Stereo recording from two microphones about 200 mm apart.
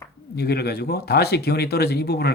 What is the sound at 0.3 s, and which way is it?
Speech, 55° left (ahead or behind).